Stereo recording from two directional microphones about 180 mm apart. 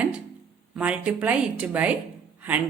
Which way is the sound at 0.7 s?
5° right (ahead or behind).